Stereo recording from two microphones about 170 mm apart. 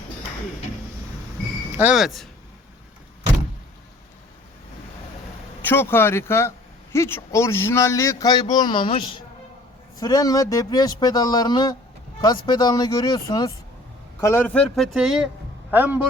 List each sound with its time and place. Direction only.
1.7 s speech: 5° right (ahead or behind)
5.6 s a man's voice: 15° left (ahead or behind); by 16.0 s 10° right (ahead or behind)